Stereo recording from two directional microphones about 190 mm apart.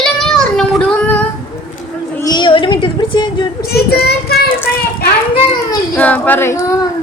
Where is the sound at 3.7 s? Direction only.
55° left (ahead or behind).